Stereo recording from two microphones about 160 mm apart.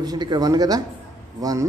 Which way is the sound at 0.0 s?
25° right (ahead or behind).